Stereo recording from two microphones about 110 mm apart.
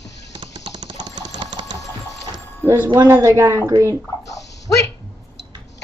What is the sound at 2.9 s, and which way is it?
Speech, 25° right (ahead or behind).